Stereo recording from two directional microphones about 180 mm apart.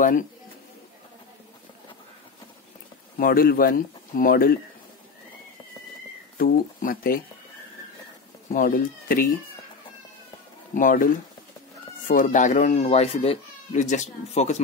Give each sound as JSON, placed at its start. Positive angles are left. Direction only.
{"t": 3.2, "sound": "speech", "side_deg": 55}
{"t": 6.3, "sound": "speech", "side_deg": 55}
{"t": 8.5, "sound": "speech", "side_deg": 50}
{"t": 10.7, "sound": "speech", "side_deg": 50}
{"t": 12.1, "sound": "speech", "side_deg": 45}